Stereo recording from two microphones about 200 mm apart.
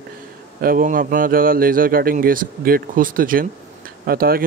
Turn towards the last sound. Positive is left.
turn(degrees=-50)  # may be behind; listen again after turning